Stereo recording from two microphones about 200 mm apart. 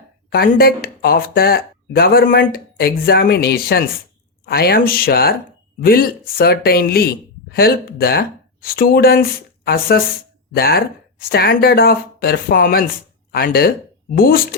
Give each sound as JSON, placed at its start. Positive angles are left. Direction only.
{"t": 0.3, "sound": "speech", "side_deg": 50}